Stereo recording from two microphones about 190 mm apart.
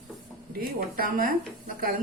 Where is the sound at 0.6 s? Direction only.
50° right (ahead or behind).